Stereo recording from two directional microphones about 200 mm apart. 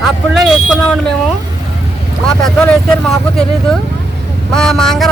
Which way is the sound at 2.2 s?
5° left (ahead or behind).